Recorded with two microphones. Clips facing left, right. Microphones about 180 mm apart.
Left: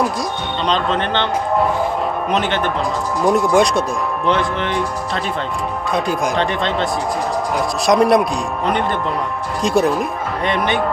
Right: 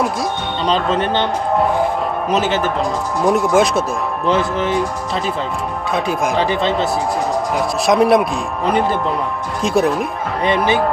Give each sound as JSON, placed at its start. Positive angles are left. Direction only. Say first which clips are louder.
{"t": 0.7, "sound": "speech", "louder": "right 2 dB", "side_deg": -5}
{"t": 2.3, "sound": "a man's voice", "louder": "right 3 dB", "side_deg": -5}